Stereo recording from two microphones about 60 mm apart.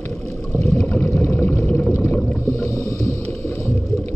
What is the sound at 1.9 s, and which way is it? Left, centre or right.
Boat, left.